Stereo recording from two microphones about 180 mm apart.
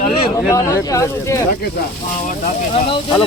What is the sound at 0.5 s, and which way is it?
Speech, 15° left (ahead or behind).